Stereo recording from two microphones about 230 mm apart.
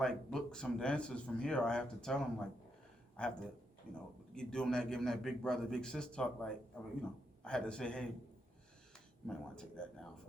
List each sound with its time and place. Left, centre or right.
0.0 s speech: centre
9.2 s speech: centre